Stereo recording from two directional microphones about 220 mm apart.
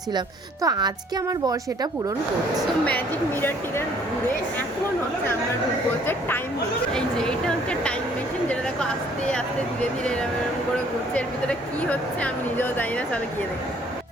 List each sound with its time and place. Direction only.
0.6 s speech: 20° right (ahead or behind)
6.1 s a woman's voice: 10° left (ahead or behind)
11.1 s speech: 5° left (ahead or behind)